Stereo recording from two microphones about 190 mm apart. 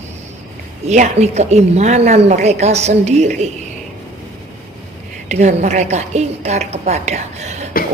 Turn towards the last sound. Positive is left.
turn(degrees=-35)  # may be behind; listen again after turning